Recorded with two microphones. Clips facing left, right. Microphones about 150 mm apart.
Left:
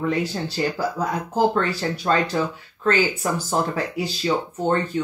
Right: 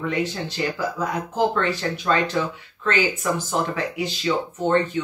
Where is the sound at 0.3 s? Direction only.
35° left (ahead or behind).